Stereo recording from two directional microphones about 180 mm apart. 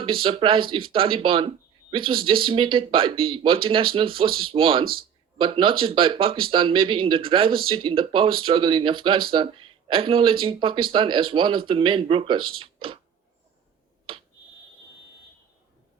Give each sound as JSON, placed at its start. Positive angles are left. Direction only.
{"t": 0.0, "sound": "speech", "side_deg": -30}
{"t": 14.1, "sound": "finger snapping", "side_deg": -30}